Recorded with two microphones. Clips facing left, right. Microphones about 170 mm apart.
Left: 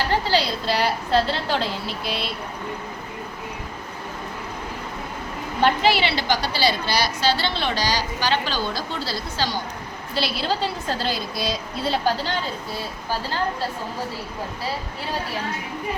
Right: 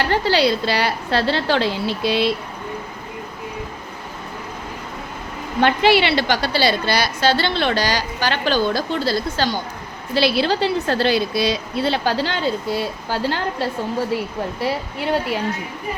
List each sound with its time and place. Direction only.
0.0 s a woman's voice: 65° right (ahead or behind)
5.6 s a woman's voice: 70° right (ahead or behind)
10.2 s a woman's voice: 75° right (ahead or behind)